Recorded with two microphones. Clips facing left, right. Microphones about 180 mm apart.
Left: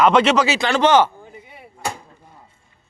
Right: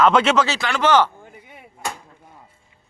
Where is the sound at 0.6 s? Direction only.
30° left (ahead or behind).